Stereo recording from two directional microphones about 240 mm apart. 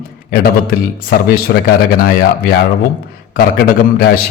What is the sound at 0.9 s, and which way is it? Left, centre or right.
A man's voice, left.